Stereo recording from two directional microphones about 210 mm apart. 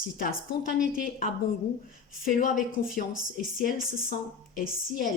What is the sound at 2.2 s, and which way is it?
Speech, 40° left (ahead or behind).